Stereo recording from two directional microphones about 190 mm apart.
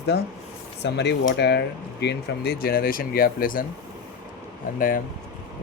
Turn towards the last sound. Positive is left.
turn(degrees=45)  # may be behind; listen again after turning